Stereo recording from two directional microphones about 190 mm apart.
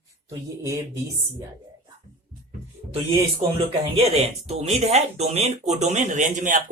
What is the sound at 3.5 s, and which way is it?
Speech, 35° right (ahead or behind).